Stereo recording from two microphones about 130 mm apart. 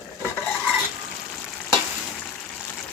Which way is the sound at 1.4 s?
10° left (ahead or behind).